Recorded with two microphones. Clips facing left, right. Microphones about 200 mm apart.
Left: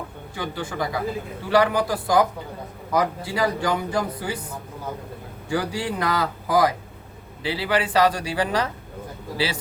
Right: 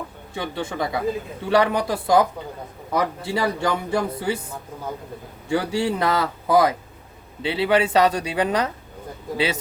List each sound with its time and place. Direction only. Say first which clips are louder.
0.3 s a man's voice: right 2 dB; 25° right (ahead or behind)
5.5 s a man's voice: right 4 dB; 25° right (ahead or behind)